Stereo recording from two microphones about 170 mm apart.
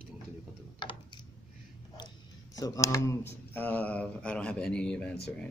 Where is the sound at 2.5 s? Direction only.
20° left (ahead or behind).